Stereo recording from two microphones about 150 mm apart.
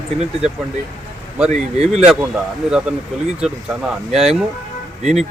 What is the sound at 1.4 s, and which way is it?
Speech, 45° right (ahead or behind).